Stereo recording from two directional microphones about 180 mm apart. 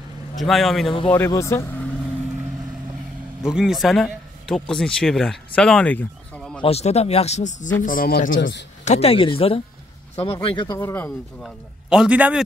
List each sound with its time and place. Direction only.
0.4 s speech: centre (ahead or behind)
1.1 s speech: 15° left (ahead or behind)
3.4 s a man's voice: 5° right (ahead or behind)
6.6 s speech: 35° left (ahead or behind)
7.8 s speech: 50° left (ahead or behind)
8.4 s a man's voice: 75° left (ahead or behind)
8.8 s speech: 35° left (ahead or behind)
10.8 s speech: 15° left (ahead or behind)
11.1 s speech: centre (ahead or behind)